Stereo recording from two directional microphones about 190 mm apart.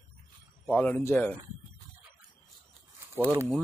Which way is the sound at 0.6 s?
10° left (ahead or behind).